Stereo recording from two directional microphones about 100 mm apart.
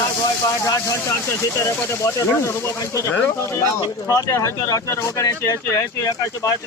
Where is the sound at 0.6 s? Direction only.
30° left (ahead or behind).